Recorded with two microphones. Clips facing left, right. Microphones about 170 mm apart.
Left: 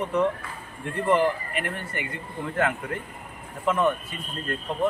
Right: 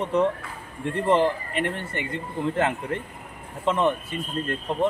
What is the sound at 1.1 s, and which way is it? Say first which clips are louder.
Speech: right 1 dB; 25° right (ahead or behind).